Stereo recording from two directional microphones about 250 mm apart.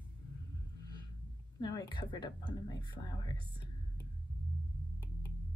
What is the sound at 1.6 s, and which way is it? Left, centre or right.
Speech, centre.